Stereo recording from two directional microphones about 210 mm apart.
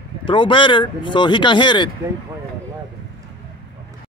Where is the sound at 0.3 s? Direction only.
25° left (ahead or behind).